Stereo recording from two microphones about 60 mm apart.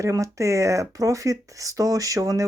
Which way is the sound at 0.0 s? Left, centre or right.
Right.